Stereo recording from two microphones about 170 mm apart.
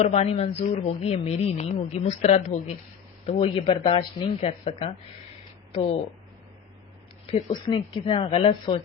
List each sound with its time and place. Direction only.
0.0 s speech: 40° left (ahead or behind)
7.3 s speech: 40° left (ahead or behind)